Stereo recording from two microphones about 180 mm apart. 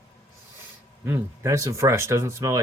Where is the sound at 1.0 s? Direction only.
15° right (ahead or behind).